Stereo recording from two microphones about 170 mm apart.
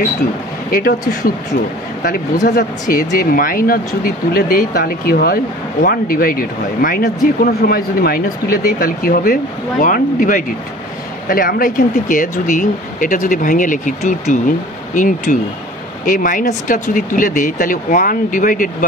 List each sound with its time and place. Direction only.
0.7 s speech: 55° left (ahead or behind)
2.4 s speech: 60° left (ahead or behind)